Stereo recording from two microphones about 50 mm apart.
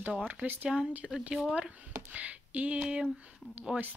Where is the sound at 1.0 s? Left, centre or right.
Centre.